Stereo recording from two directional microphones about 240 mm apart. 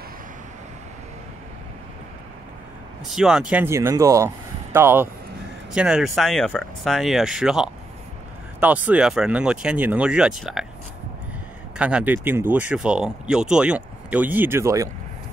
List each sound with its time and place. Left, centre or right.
3.1 s speech: centre
11.8 s speech: centre